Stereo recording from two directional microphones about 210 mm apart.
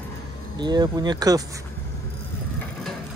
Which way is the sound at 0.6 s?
20° right (ahead or behind).